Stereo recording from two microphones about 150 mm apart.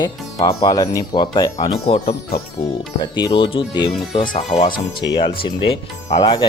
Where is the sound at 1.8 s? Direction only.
40° left (ahead or behind).